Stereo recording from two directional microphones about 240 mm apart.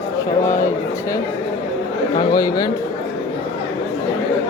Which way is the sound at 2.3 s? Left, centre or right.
Centre.